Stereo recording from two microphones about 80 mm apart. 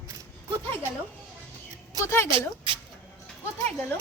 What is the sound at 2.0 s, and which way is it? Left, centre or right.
Speech, left.